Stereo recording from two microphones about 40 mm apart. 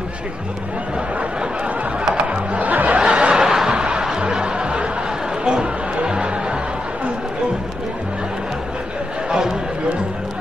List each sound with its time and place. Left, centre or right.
2.5 s music: right
3.0 s snicker: right
4.2 s music: right